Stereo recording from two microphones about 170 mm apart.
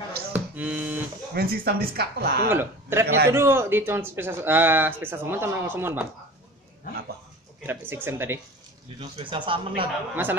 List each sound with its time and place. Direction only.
0.3 s a sound: 10° right (ahead or behind)
1.3 s speech: 60° right (ahead or behind)
2.5 s a man's voice: 15° right (ahead or behind)
7.6 s speech: 15° right (ahead or behind)
9.0 s speech: 30° right (ahead or behind)
10.2 s speech: 10° right (ahead or behind)